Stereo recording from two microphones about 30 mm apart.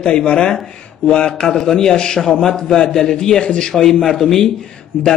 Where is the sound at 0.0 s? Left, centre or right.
Left.